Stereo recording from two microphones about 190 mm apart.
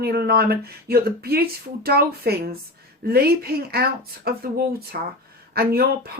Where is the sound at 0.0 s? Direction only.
55° right (ahead or behind).